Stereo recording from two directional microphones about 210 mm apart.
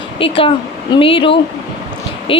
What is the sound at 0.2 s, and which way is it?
Speech, 25° left (ahead or behind).